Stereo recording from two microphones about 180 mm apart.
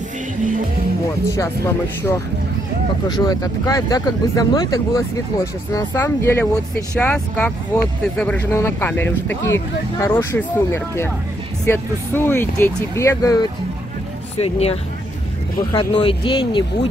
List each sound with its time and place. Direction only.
1.3 s speech: 15° left (ahead or behind)
14.4 s speech: 35° left (ahead or behind)